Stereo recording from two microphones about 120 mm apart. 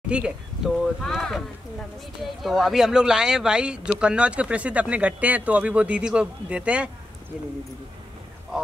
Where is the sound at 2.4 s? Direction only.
5° right (ahead or behind).